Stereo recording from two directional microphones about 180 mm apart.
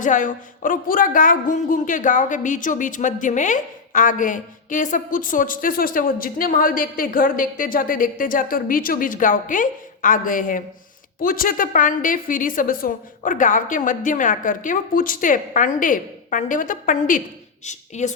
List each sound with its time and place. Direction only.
0.0 s a woman's voice: 45° left (ahead or behind)